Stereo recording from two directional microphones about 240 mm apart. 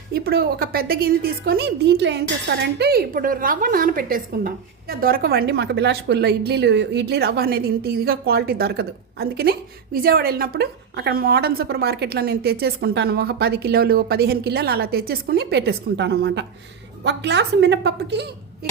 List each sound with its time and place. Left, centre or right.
0.1 s a woman's voice: right